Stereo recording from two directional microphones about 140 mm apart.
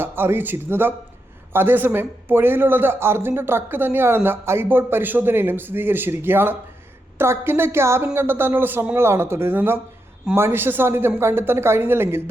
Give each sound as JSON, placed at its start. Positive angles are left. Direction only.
{"t": 0.0, "sound": "a man's voice", "side_deg": -15}